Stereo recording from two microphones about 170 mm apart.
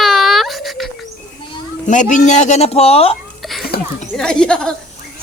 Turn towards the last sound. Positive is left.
turn(degrees=5)  # may be behind; listen again after turning